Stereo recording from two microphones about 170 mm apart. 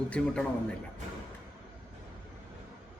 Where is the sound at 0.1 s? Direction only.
5° left (ahead or behind).